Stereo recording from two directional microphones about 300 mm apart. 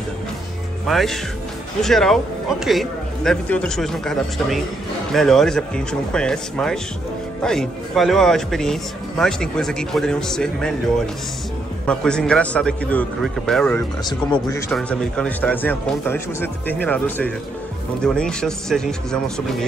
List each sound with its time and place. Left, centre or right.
0.8 s a man's voice: centre
11.8 s a man's voice: centre